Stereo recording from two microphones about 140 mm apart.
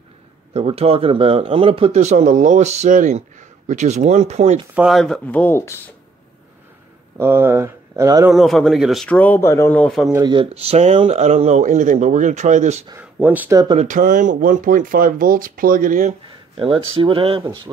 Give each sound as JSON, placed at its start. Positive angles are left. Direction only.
{"t": 0.5, "sound": "speech", "side_deg": -45}
{"t": 2.0, "sound": "speech", "side_deg": -60}
{"t": 4.7, "sound": "speech", "side_deg": 0}
{"t": 7.2, "sound": "speech", "side_deg": -15}
{"t": 8.3, "sound": "speech", "side_deg": 0}
{"t": 10.2, "sound": "speech", "side_deg": -40}
{"t": 12.9, "sound": "speech", "side_deg": -10}
{"t": 13.7, "sound": "speech", "side_deg": -70}
{"t": 16.3, "sound": "speech", "side_deg": -40}